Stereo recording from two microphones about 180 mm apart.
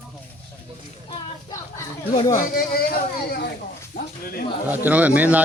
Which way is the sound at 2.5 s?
55° left (ahead or behind).